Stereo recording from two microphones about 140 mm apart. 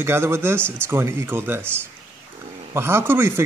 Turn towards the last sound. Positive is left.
turn(degrees=-15)  # may be behind; listen again after turning